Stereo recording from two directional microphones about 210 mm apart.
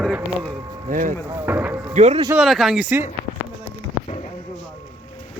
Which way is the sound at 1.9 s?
35° right (ahead or behind).